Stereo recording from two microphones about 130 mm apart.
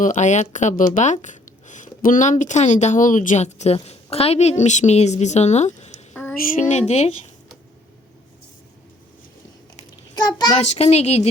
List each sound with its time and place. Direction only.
0.0 s speech: 80° left; by 7.3 s 55° left (ahead or behind)
10.2 s a child's voice: 30° left (ahead or behind)
10.6 s speech: 55° left (ahead or behind)